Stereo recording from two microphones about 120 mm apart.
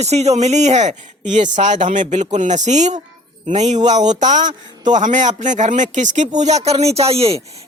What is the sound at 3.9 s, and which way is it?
Speech, 90° right.